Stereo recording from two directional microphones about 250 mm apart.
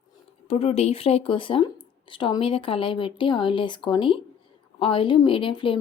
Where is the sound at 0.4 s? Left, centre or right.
Left.